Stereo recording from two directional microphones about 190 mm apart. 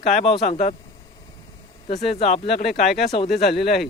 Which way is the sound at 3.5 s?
55° left (ahead or behind).